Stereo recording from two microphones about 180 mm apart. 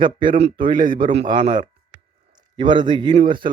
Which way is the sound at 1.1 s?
35° right (ahead or behind).